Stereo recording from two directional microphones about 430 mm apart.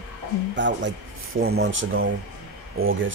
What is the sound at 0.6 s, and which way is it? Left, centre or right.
Speech, right.